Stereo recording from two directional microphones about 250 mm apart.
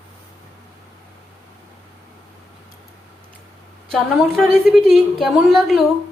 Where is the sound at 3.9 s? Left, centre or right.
Centre.